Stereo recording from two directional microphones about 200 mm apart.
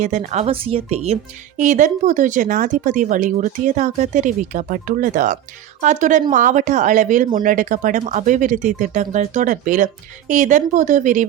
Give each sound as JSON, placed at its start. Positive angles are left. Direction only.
{"t": 0.0, "sound": "speech", "side_deg": -35}